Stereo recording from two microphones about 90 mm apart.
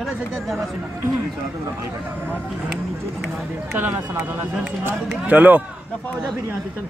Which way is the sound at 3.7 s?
25° right (ahead or behind).